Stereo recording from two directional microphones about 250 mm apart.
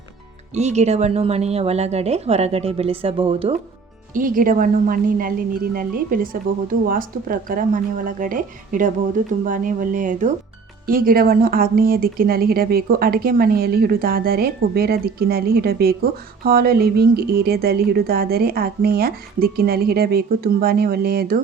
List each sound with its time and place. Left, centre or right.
0.5 s speech: right
4.1 s speech: right